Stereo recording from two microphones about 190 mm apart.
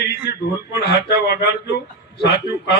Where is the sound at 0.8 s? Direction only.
55° left (ahead or behind).